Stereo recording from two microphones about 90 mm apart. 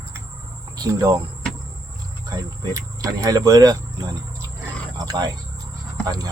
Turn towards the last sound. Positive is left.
turn(degrees=-45)  # may be behind; listen again after turning